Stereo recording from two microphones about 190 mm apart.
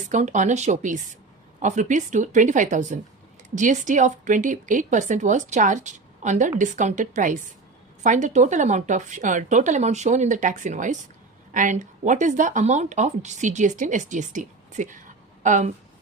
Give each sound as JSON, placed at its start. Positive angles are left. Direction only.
{"t": 0.1, "sound": "speech", "side_deg": -40}